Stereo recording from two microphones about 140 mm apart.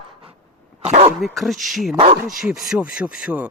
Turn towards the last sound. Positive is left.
turn(degrees=-10)  # may be behind; listen again after turning